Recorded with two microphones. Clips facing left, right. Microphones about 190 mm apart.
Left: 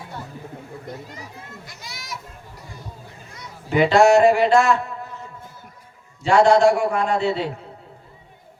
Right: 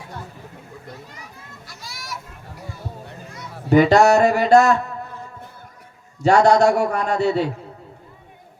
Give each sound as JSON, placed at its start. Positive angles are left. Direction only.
{"t": 1.6, "sound": "children playing", "side_deg": 20}
{"t": 3.7, "sound": "speech", "side_deg": -40}
{"t": 6.2, "sound": "a man's voice", "side_deg": -40}